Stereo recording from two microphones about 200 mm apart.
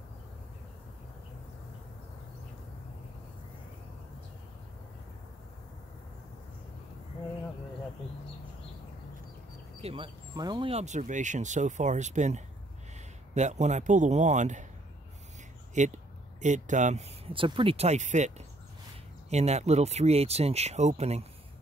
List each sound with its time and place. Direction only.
9.8 s speech: 25° right (ahead or behind)
15.7 s speech: 35° right (ahead or behind)